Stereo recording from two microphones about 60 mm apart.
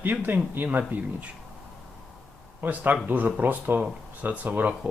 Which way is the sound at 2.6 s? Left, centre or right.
Right.